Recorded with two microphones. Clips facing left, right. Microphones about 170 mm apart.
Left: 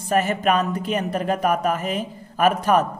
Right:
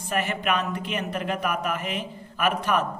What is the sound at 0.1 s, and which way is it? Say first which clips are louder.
Speech: left 6 dB; 40° left (ahead or behind).